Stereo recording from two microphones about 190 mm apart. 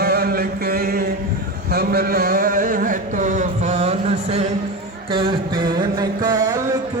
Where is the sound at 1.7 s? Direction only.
55° right (ahead or behind); by 6.6 s 20° right (ahead or behind).